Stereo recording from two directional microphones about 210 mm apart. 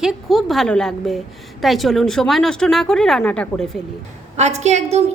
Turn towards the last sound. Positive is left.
turn(degrees=-30)  # may be behind; listen again after turning